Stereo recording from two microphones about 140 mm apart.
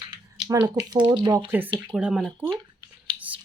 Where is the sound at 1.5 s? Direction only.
15° right (ahead or behind).